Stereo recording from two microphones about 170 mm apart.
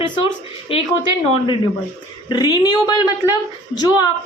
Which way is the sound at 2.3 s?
25° left (ahead or behind).